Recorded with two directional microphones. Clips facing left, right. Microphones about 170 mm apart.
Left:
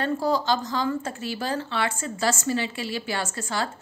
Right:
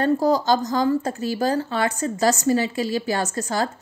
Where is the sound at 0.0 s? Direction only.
40° right (ahead or behind).